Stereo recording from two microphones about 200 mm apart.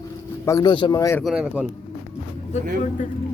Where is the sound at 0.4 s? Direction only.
20° left (ahead or behind).